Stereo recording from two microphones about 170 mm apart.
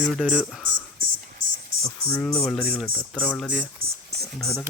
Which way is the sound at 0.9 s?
55° right (ahead or behind).